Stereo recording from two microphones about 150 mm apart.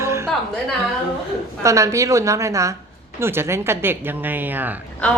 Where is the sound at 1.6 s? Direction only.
20° right (ahead or behind).